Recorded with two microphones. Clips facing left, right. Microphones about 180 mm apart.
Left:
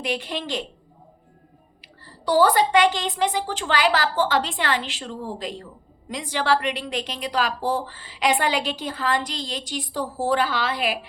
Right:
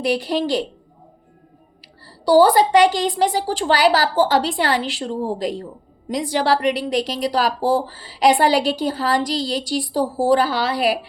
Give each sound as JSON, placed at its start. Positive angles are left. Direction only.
{"t": 0.0, "sound": "speech", "side_deg": -35}
{"t": 2.0, "sound": "speech", "side_deg": -35}